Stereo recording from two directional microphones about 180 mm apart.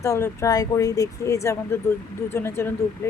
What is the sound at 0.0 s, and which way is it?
Speech, 15° left (ahead or behind).